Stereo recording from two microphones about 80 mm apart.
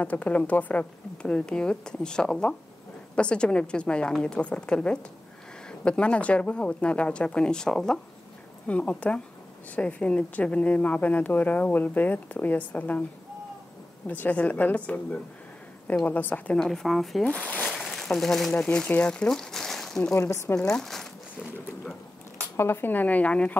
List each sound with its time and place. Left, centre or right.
0.0 s a woman's voice: centre
14.0 s a woman's voice: left
16.5 s speech: centre
17.6 s a sound: centre
18.6 s a woman's voice: centre
20.2 s speech: left
20.7 s zipper: centre
22.6 s a woman's voice: left